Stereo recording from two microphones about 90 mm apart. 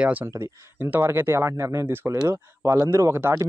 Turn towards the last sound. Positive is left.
turn(degrees=-25)  # may be behind; listen again after turning